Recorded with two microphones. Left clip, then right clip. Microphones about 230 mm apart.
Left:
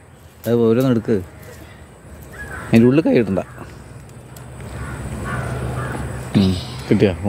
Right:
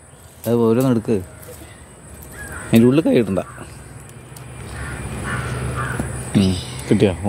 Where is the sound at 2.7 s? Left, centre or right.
Centre.